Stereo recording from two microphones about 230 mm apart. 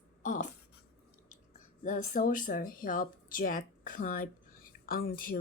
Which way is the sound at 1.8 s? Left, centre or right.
Left.